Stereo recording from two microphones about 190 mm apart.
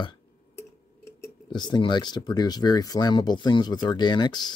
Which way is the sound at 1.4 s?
20° left (ahead or behind).